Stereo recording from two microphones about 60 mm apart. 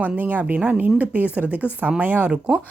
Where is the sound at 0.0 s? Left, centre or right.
Right.